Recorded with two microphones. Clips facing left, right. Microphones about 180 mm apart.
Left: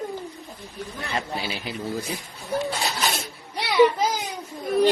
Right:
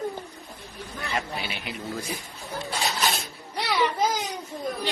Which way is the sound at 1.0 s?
30° left (ahead or behind).